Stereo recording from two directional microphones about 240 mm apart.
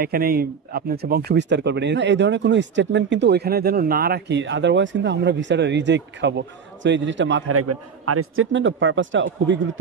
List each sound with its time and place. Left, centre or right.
0.0 s speech: right